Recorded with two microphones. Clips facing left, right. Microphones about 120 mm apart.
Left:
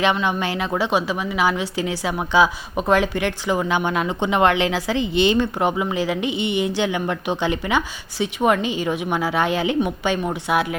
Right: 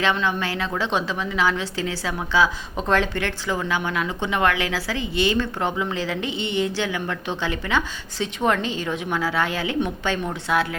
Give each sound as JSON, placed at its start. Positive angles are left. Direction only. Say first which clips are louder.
{"t": 0.0, "sound": "a woman's voice", "louder": "left 2 dB", "side_deg": 15}